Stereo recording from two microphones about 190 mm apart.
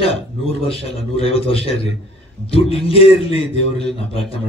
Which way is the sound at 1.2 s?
30° left (ahead or behind).